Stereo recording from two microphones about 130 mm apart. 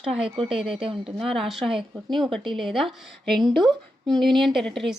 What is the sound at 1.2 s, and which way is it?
A woman's voice, centre (ahead or behind).